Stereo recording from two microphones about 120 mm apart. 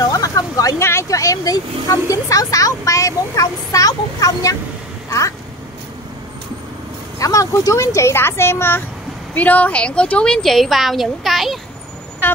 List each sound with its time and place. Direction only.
0.0 s speech: 30° left (ahead or behind)
7.2 s a woman's voice: 25° left (ahead or behind); by 11.6 s centre (ahead or behind)